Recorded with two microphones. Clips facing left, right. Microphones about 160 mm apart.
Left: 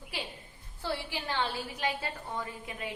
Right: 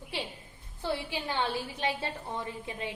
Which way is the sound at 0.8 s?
20° right (ahead or behind).